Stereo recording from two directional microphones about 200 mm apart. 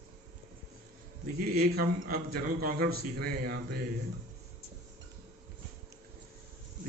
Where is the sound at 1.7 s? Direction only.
50° right (ahead or behind).